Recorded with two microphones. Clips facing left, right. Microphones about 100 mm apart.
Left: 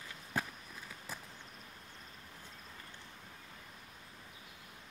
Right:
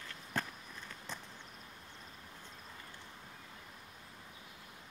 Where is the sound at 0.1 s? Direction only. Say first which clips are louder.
Left 1 dB; 10° left (ahead or behind).